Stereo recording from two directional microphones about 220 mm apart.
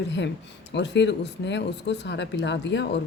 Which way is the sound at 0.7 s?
50° left (ahead or behind).